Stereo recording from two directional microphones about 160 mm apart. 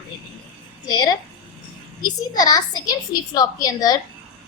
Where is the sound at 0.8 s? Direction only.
25° left (ahead or behind).